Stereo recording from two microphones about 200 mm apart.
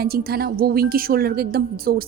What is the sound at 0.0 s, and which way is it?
A woman's voice, 50° right (ahead or behind).